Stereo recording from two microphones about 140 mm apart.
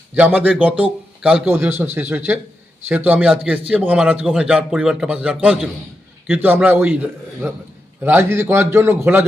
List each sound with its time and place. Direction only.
0.1 s speech: 15° right (ahead or behind)
8.0 s speech: 15° right (ahead or behind)